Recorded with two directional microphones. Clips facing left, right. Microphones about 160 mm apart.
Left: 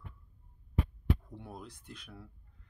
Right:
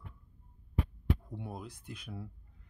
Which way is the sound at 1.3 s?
10° right (ahead or behind).